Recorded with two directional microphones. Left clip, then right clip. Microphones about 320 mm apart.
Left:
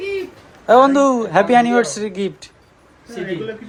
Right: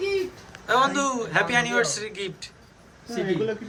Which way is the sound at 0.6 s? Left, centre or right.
Centre.